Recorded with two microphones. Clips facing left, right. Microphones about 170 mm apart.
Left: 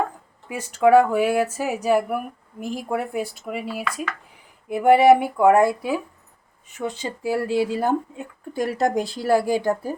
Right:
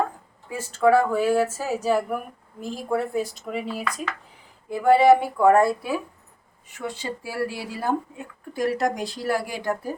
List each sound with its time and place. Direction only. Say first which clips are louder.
0.4 s speech: left 2 dB; 15° left (ahead or behind)
4.7 s speech: left 2 dB; 20° left (ahead or behind)